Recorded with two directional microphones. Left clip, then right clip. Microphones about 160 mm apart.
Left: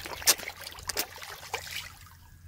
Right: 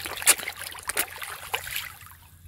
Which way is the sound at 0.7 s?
10° left (ahead or behind).